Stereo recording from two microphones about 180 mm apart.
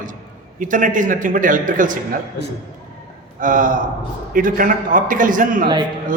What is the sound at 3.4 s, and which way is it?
A man's voice, 45° right (ahead or behind).